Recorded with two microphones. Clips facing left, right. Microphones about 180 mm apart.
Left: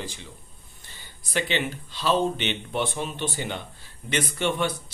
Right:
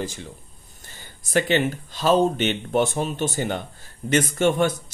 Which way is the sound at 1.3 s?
45° right (ahead or behind).